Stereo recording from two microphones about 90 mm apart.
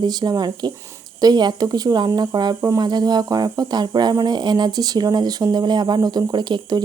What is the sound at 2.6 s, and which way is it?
Speech, 40° right (ahead or behind).